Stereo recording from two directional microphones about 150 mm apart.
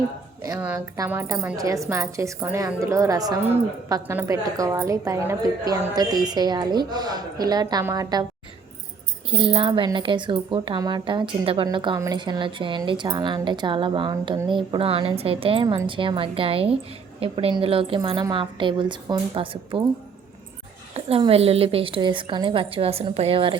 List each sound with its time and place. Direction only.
0.9 s a woman's voice: 15° right (ahead or behind)
9.3 s a woman's voice: 35° right (ahead or behind)
15.6 s a woman's voice: 30° right (ahead or behind)
20.9 s a woman's voice: 40° right (ahead or behind)